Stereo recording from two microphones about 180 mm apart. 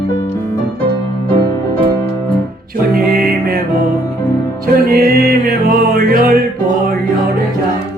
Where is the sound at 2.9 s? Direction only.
55° right (ahead or behind).